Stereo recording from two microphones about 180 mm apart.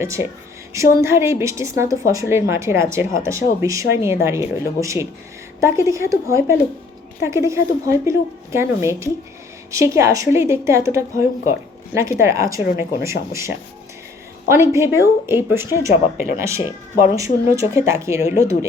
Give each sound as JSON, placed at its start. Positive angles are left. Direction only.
{"t": 0.0, "sound": "speech", "side_deg": -15}